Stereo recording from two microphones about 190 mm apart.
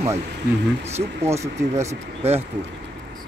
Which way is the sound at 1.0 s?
15° right (ahead or behind).